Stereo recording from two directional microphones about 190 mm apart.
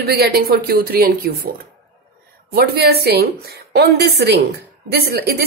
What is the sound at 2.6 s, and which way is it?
A woman's voice, 55° right (ahead or behind).